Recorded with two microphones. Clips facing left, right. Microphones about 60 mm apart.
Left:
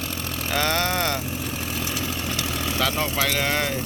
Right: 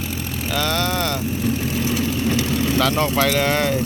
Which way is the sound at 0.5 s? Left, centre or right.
Left.